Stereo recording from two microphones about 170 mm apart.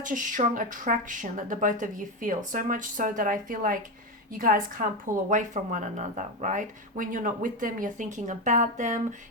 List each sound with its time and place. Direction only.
0.0 s a woman's voice: 50° right (ahead or behind)